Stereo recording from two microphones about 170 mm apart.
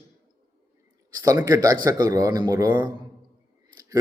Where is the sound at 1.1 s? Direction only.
20° right (ahead or behind).